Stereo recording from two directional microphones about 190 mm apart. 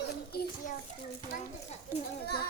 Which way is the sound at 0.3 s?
45° left (ahead or behind).